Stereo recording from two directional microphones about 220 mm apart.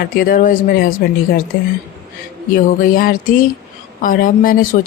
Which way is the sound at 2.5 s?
40° left (ahead or behind).